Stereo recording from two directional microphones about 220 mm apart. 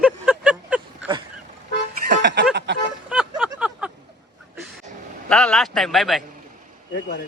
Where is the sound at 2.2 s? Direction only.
55° right (ahead or behind).